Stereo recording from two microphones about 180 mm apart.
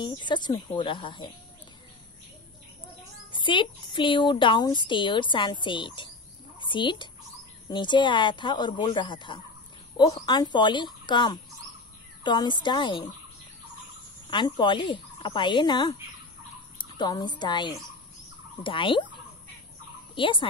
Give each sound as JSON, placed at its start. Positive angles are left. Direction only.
{"t": 0.0, "sound": "speech", "side_deg": 25}
{"t": 3.3, "sound": "speech", "side_deg": 25}
{"t": 14.3, "sound": "speech", "side_deg": 25}
{"t": 20.2, "sound": "speech", "side_deg": 30}